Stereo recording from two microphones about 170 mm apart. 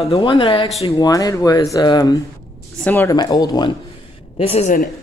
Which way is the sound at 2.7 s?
10° left (ahead or behind).